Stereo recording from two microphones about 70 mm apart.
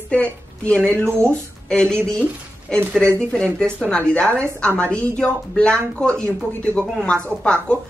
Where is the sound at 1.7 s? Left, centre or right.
Centre.